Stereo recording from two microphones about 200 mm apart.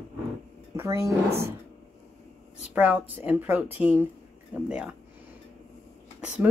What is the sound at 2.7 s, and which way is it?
Speech, 5° right (ahead or behind).